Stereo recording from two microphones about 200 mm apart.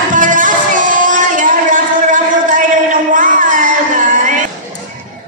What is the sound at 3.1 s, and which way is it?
Music, 40° right (ahead or behind).